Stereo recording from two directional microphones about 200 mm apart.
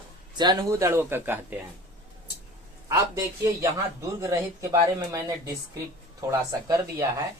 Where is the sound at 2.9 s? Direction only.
15° right (ahead or behind).